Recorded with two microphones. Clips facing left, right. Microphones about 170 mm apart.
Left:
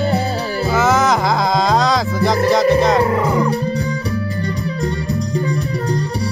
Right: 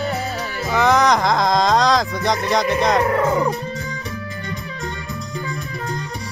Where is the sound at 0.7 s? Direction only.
5° left (ahead or behind).